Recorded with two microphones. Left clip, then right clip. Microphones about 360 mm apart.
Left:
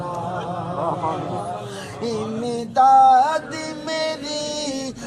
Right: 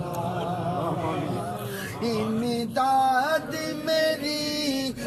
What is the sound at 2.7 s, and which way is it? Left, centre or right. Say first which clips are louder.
Male singing: left 10 dB; centre.